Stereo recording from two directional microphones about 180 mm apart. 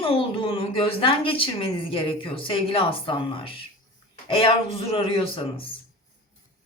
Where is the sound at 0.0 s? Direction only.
30° left (ahead or behind).